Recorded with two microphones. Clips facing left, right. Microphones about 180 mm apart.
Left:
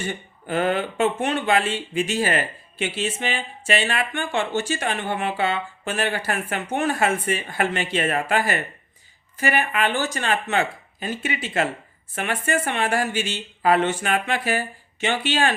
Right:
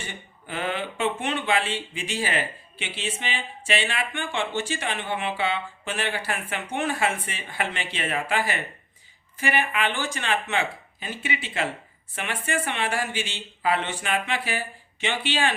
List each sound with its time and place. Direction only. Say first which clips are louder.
0.0 s speech: left 9 dB; 45° left (ahead or behind)